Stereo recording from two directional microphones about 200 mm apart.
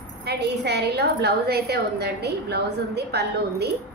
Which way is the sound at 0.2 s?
55° right (ahead or behind).